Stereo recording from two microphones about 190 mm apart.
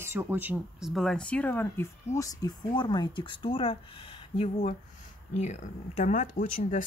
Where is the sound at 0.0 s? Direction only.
15° right (ahead or behind).